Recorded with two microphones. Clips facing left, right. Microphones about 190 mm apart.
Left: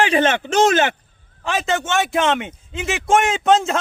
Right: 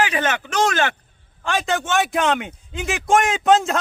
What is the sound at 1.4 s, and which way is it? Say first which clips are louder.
A man's voice: left 1 dB; centre (ahead or behind).